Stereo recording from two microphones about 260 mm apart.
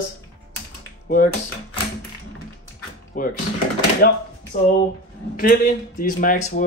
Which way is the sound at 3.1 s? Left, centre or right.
Left.